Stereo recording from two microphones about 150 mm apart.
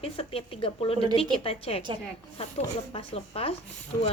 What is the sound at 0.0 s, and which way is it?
A woman's voice, 40° left (ahead or behind).